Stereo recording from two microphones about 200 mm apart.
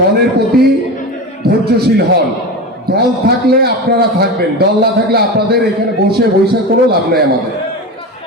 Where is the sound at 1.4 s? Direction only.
50° right (ahead or behind).